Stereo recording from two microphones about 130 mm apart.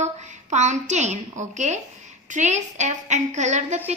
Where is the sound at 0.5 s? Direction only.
65° right (ahead or behind).